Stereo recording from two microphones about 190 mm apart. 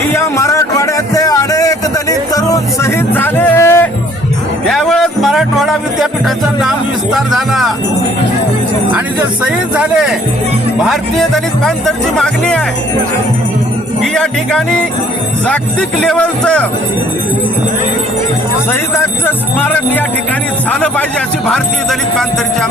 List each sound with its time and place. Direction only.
0.1 s a sound: 15° left (ahead or behind)
4.7 s music: centre (ahead or behind)
9.4 s speech: 5° right (ahead or behind)
14.0 s speech: 5° left (ahead or behind)
16.0 s speech: 5° left (ahead or behind)
18.7 s speech: 15° left (ahead or behind)